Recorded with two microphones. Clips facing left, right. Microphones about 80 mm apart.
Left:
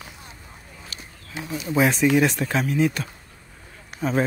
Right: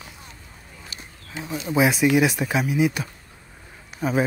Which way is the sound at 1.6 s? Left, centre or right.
Centre.